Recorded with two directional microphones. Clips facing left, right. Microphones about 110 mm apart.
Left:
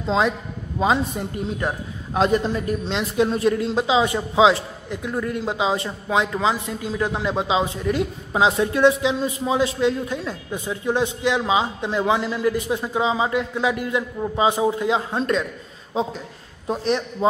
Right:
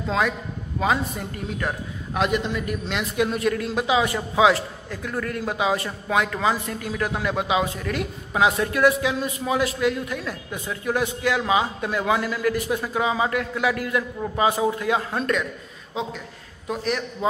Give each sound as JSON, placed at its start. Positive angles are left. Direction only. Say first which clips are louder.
{"t": 0.0, "sound": "a man's voice", "louder": "left 3 dB", "side_deg": 25}
{"t": 2.2, "sound": "a man's voice", "louder": "left 4 dB", "side_deg": 35}